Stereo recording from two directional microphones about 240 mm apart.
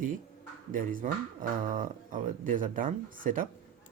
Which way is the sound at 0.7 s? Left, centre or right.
Right.